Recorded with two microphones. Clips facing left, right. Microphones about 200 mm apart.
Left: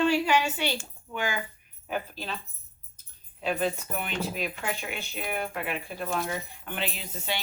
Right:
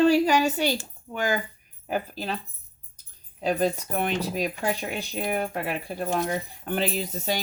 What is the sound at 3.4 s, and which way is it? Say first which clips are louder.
Speech: right 4 dB; 40° right (ahead or behind).